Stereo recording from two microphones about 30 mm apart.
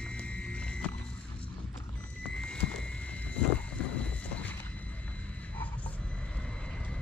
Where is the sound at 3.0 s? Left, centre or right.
Left.